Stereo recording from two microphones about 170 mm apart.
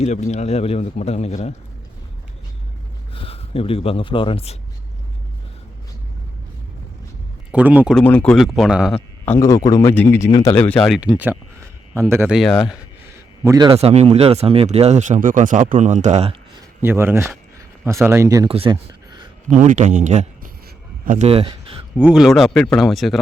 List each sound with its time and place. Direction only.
0.0 s a man's voice: 40° left (ahead or behind)
3.2 s speech: 35° left (ahead or behind)
7.5 s speech: 10° right (ahead or behind)
7.9 s speech: 5° left (ahead or behind)
9.2 s speech: 15° left (ahead or behind); by 12.3 s 15° right (ahead or behind)
12.3 s speech: centre (ahead or behind)
13.4 s speech: 20° right (ahead or behind)
13.8 s speech: 40° right (ahead or behind)
16.8 s speech: 15° right (ahead or behind)
18.4 s speech: 30° right (ahead or behind)
19.5 s speech: 50° right (ahead or behind)
21.2 s speech: 35° right (ahead or behind)
21.9 s speech: 5° right (ahead or behind)